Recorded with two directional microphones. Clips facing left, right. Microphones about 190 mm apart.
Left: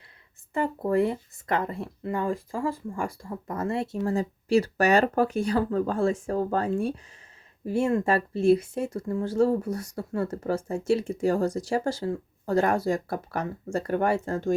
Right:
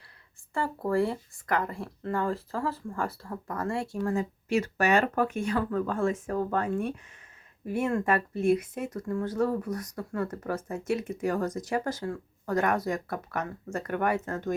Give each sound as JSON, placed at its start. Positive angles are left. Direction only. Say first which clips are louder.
{"t": 0.5, "sound": "speech", "louder": "left 3 dB", "side_deg": 20}